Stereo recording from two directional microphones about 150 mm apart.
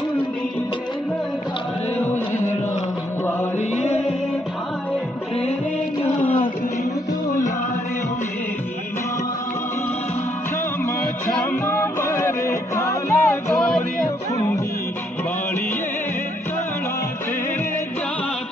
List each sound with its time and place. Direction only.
3.5 s music: 45° left (ahead or behind)
11.2 s music: 20° left (ahead or behind)
13.6 s music: centre (ahead or behind)